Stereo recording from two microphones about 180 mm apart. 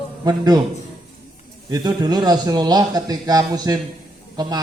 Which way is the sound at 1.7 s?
20° right (ahead or behind).